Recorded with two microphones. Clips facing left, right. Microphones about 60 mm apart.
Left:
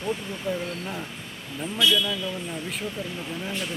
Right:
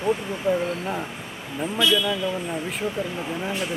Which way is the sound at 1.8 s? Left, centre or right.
Centre.